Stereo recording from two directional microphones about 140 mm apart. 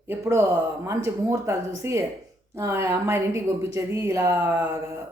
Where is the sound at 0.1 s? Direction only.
20° right (ahead or behind).